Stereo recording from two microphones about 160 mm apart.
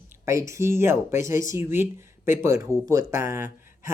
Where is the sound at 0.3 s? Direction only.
20° right (ahead or behind).